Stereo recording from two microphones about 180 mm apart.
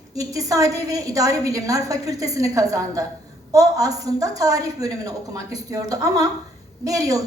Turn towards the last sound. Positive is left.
turn(degrees=-20)  # may be behind; listen again after turning